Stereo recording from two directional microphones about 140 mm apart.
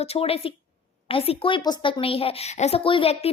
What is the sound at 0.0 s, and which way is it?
Speech, 45° left (ahead or behind).